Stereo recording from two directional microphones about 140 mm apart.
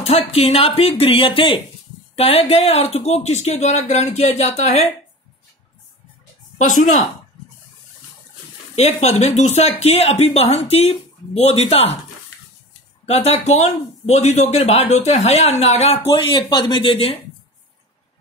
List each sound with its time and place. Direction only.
0.0 s speech: 45° left (ahead or behind)
6.6 s speech: 65° left (ahead or behind)
8.7 s speech: 50° left (ahead or behind)
13.0 s speech: 50° left (ahead or behind)